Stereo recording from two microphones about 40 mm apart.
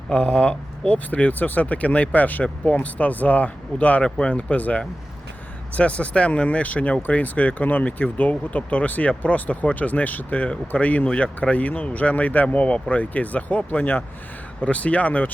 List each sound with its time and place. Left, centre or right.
0.1 s speech: left
0.9 s speech: left
4.0 s speech: left
14.6 s speech: left